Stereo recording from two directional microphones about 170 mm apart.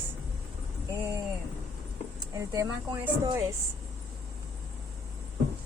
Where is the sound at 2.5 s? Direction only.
20° right (ahead or behind).